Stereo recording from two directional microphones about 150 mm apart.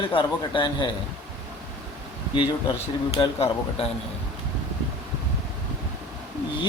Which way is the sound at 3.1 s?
40° left (ahead or behind).